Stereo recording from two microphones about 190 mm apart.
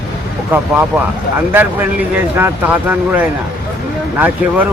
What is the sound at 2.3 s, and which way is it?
Speech, 10° right (ahead or behind).